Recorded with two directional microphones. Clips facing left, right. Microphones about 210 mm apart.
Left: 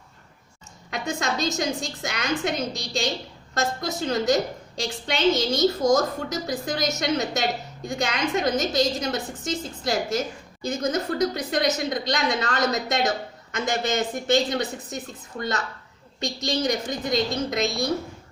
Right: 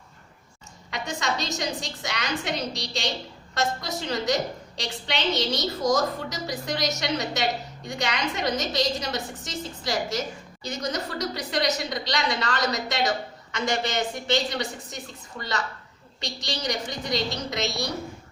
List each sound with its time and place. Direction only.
0.9 s a woman's voice: 50° left (ahead or behind)